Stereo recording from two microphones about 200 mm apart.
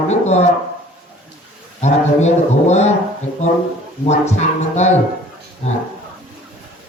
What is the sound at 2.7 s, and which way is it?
Speech, 35° left (ahead or behind).